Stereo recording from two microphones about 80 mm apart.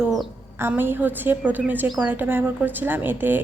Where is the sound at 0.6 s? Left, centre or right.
Right.